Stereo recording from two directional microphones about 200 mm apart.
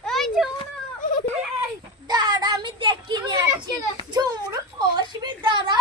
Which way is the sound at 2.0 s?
20° right (ahead or behind).